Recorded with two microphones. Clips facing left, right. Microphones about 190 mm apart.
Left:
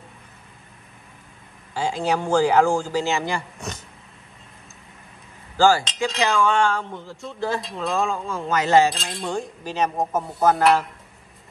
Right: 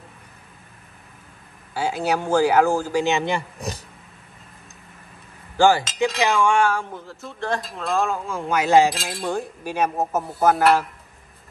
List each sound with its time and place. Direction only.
1.7 s speech: 10° right (ahead or behind)
3.0 s a man's voice: 20° right (ahead or behind)
3.5 s a sound: 35° right (ahead or behind)
5.6 s speech: 15° right (ahead or behind)
8.9 s speech: centre (ahead or behind)